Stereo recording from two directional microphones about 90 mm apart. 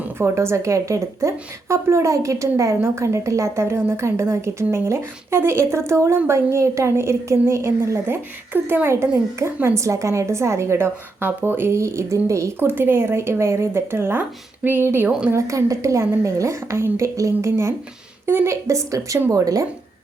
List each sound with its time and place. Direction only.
0.2 s a woman's voice: 30° right (ahead or behind)